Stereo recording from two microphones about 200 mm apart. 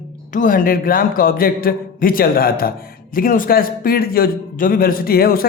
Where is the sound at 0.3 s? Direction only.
45° left (ahead or behind).